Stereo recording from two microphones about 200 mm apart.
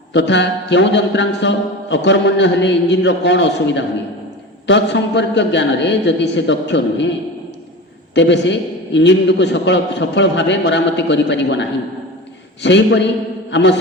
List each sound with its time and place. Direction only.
0.1 s a man's voice: 60° left (ahead or behind)
8.1 s a man's voice: 60° left (ahead or behind)
12.6 s a man's voice: 60° left (ahead or behind)